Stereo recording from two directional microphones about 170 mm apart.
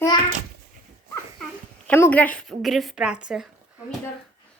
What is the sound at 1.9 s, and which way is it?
A woman's voice, 10° left (ahead or behind).